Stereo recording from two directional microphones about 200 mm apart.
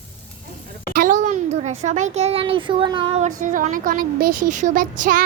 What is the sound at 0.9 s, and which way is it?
A child's voice, 40° right (ahead or behind).